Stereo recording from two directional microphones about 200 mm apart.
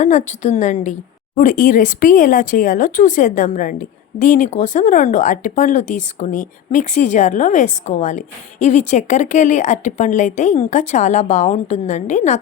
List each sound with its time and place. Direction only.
0.0 s speech: 35° left (ahead or behind)